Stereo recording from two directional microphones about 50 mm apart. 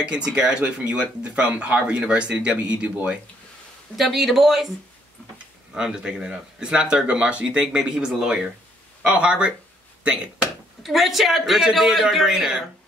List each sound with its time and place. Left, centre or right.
0.0 s speech: right
3.9 s a man's voice: centre
5.8 s speech: centre
10.8 s a man's voice: centre